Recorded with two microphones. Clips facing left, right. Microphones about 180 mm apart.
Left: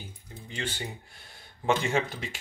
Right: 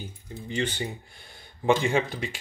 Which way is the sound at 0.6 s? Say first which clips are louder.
Right 6 dB; centre (ahead or behind).